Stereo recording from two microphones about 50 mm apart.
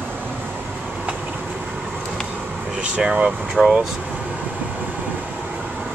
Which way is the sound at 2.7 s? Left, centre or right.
Right.